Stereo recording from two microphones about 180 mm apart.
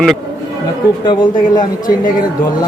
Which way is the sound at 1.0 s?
25° left (ahead or behind).